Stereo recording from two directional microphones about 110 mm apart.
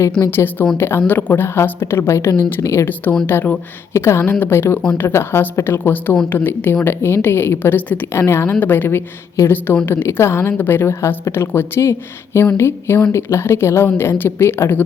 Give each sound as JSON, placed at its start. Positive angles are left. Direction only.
{"t": 0.3, "sound": "a woman's voice", "side_deg": 20}